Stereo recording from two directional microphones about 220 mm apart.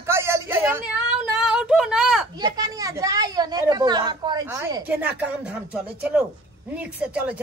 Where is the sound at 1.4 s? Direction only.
5° right (ahead or behind).